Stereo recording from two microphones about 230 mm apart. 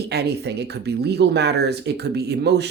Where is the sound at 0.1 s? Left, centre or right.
Right.